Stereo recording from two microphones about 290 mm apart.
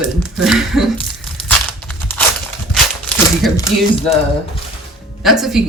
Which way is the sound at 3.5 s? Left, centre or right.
Centre.